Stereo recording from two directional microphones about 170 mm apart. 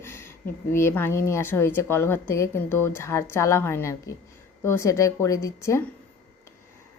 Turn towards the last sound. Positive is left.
turn(degrees=15)  # may be behind; listen again after turning